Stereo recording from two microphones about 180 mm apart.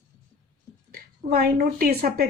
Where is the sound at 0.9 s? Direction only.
55° right (ahead or behind).